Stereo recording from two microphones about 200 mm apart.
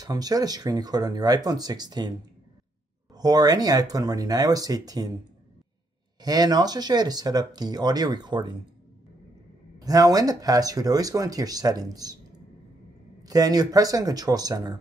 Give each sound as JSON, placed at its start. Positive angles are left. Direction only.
{"t": 0.0, "sound": "speech", "side_deg": -20}
{"t": 3.2, "sound": "speech", "side_deg": -20}
{"t": 6.2, "sound": "speech", "side_deg": -20}
{"t": 9.8, "sound": "speech", "side_deg": -20}
{"t": 13.2, "sound": "speech", "side_deg": -20}